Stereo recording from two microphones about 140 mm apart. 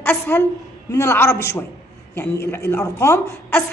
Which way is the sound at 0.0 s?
10° left (ahead or behind).